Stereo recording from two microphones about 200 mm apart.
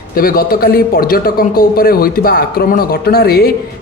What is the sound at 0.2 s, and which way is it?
A man's voice, 45° left (ahead or behind).